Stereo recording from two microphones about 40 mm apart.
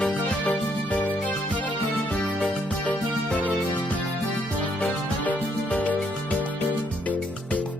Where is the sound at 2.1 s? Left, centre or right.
Left.